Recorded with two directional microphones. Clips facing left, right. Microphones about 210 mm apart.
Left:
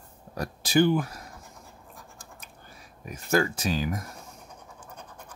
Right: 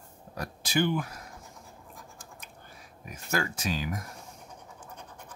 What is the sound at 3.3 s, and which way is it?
Speech, 35° left (ahead or behind).